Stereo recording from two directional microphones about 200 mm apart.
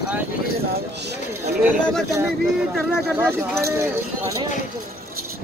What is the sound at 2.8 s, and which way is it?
Speech, centre (ahead or behind).